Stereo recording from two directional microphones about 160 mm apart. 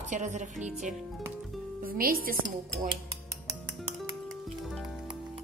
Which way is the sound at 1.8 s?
65° right (ahead or behind).